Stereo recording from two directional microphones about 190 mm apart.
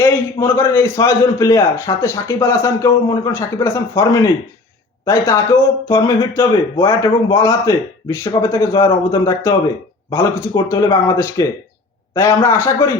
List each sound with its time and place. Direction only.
0.0 s speech: 15° left (ahead or behind)